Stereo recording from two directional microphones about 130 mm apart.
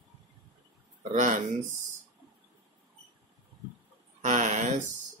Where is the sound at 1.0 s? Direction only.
65° right (ahead or behind).